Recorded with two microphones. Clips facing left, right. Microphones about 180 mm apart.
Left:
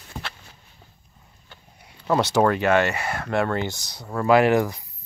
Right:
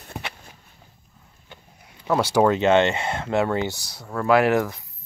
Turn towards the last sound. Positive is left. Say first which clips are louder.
# left 1 dB
turn(degrees=0)  # may be behind; listen again after turning